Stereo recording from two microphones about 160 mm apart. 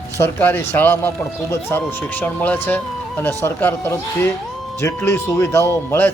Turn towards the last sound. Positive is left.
turn(degrees=15)  # may be behind; listen again after turning